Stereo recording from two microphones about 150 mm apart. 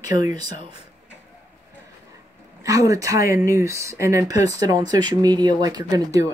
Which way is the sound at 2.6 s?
20° right (ahead or behind).